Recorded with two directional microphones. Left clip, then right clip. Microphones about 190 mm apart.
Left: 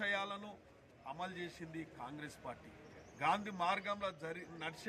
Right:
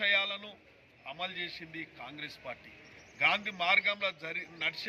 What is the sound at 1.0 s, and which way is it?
A man's voice, 10° left (ahead or behind).